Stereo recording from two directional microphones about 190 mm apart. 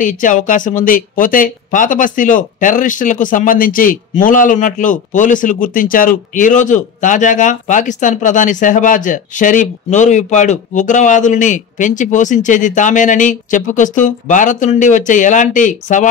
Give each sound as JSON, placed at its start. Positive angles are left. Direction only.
{"t": 0.0, "sound": "a man's voice", "side_deg": 45}